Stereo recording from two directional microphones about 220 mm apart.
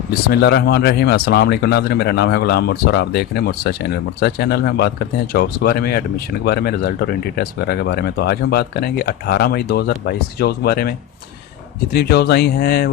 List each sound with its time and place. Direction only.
0.1 s speech: 45° left (ahead or behind)